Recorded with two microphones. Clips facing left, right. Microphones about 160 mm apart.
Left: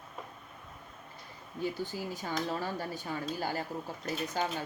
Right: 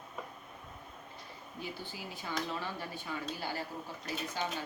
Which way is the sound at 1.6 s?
40° left (ahead or behind).